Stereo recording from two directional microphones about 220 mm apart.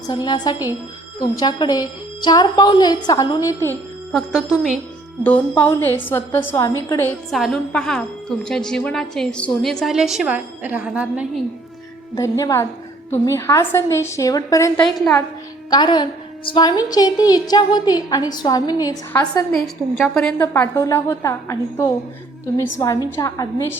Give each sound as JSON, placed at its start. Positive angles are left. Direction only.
{"t": 0.1, "sound": "a woman's voice", "side_deg": 20}
{"t": 4.1, "sound": "a woman's voice", "side_deg": -5}
{"t": 5.2, "sound": "a woman's voice", "side_deg": 5}
{"t": 7.3, "sound": "a woman's voice", "side_deg": 0}
{"t": 12.1, "sound": "a woman's voice", "side_deg": 15}
{"t": 19.5, "sound": "a woman's voice", "side_deg": 0}